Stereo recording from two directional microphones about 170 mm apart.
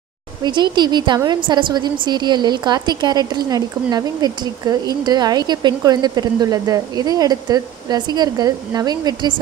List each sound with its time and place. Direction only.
0.4 s a woman's voice: 25° right (ahead or behind)